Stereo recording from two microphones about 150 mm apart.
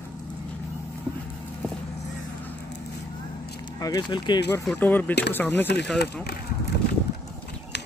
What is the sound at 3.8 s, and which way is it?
Speech, 25° left (ahead or behind).